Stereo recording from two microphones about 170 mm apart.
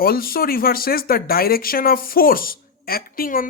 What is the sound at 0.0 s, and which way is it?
Speech, 60° left (ahead or behind).